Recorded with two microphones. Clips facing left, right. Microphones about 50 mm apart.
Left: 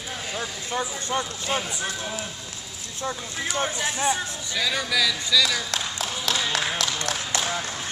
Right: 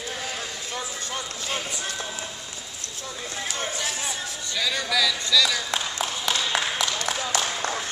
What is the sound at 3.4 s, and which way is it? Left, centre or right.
Speech, centre.